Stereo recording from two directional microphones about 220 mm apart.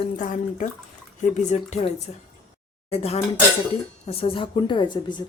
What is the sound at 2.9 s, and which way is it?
A woman's voice, 25° left (ahead or behind).